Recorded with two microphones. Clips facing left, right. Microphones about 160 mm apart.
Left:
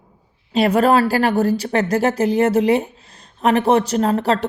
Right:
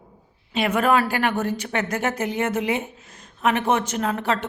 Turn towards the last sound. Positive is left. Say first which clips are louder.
# left 6 dB
turn(degrees=35)  # may be behind; listen again after turning